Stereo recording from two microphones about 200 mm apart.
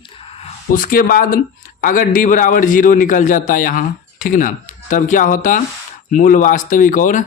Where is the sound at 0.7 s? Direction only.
45° left (ahead or behind).